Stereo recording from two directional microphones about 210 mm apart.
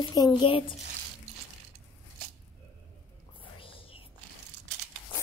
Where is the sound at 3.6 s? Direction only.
25° left (ahead or behind).